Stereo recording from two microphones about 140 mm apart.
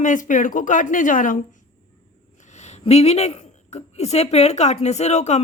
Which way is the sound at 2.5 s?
50° left (ahead or behind).